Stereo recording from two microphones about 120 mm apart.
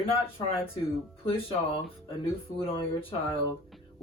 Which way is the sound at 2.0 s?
50° left (ahead or behind).